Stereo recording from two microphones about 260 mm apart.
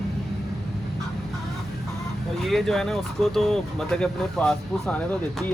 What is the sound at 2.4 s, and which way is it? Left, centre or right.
Speech, centre.